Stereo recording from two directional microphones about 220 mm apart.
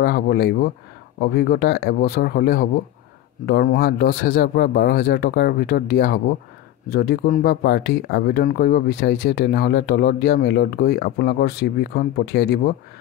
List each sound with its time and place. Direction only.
0.0 s speech: 45° left (ahead or behind)